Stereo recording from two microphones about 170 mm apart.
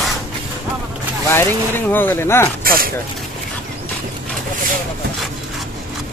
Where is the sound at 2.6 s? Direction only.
60° right (ahead or behind).